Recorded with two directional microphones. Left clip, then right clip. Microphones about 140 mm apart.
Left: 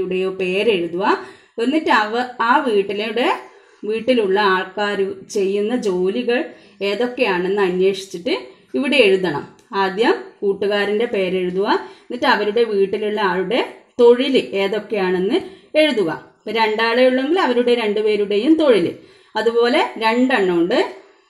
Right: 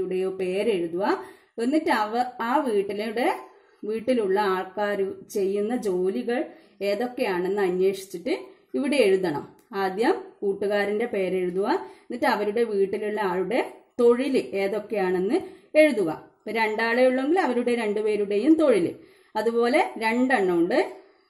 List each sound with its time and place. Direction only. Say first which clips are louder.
0.1 s a woman's voice: left 6 dB; 25° right (ahead or behind)